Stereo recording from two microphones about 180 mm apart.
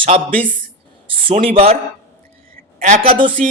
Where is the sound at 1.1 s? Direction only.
30° right (ahead or behind).